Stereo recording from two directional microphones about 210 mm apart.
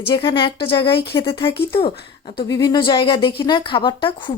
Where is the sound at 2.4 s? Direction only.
20° left (ahead or behind).